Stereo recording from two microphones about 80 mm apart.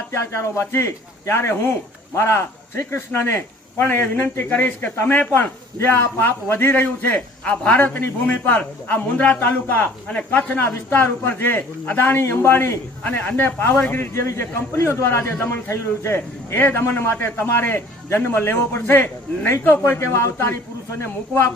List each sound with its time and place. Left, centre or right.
0.1 s a man's voice: left
20.0 s a man's voice: left